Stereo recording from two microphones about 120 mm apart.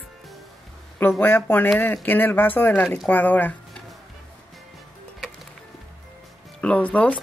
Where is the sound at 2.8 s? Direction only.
5° left (ahead or behind).